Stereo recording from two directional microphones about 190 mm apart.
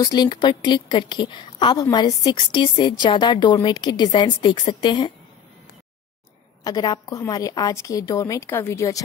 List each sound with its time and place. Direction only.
0.0 s a woman's voice: 20° left (ahead or behind)
6.6 s a woman's voice: 20° left (ahead or behind)